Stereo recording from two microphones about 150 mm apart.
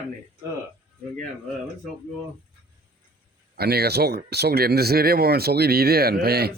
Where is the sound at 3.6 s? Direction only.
90° right.